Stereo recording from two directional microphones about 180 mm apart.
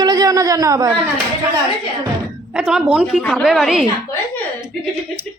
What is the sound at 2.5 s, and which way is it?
Speech, 5° right (ahead or behind).